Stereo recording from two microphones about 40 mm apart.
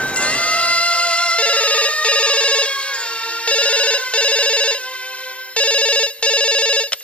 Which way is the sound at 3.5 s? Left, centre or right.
Left.